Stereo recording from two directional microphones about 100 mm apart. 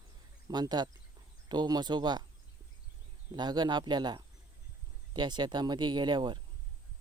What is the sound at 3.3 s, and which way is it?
Speech, 45° right (ahead or behind).